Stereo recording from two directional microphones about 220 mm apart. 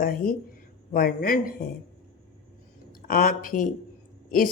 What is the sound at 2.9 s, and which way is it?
Speech, 40° left (ahead or behind).